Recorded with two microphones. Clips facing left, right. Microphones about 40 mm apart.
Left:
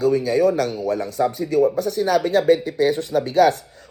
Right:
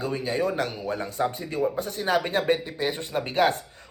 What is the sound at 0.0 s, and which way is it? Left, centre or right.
Speech, right.